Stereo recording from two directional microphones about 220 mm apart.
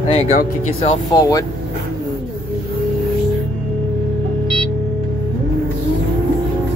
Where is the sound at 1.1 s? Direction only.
15° left (ahead or behind).